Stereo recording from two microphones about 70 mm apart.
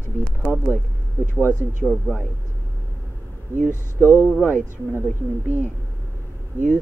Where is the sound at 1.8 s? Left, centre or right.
Centre.